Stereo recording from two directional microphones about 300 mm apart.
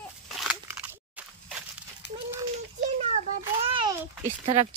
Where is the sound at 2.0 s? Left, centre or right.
Left.